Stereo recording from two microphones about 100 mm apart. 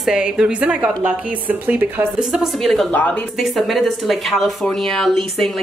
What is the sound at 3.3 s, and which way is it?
A woman's voice, centre (ahead or behind).